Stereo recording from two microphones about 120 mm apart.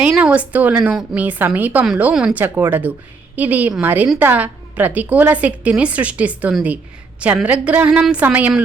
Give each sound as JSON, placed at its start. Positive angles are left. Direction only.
{"t": 0.0, "sound": "a woman's voice", "side_deg": -10}